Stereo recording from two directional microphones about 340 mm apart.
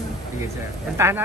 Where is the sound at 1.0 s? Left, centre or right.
Centre.